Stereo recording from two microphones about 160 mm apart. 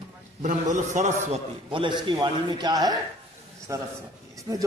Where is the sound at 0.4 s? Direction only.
45° right (ahead or behind).